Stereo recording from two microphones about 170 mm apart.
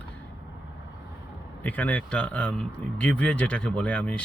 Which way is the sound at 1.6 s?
10° left (ahead or behind).